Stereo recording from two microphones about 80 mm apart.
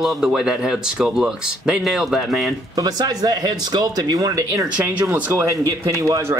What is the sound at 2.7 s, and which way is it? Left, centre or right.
Speech, right.